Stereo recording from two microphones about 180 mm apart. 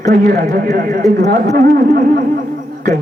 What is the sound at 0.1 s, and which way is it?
A man's voice, 55° right (ahead or behind).